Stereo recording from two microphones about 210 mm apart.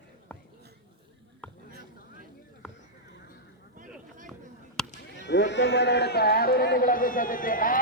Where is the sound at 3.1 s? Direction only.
50° left (ahead or behind).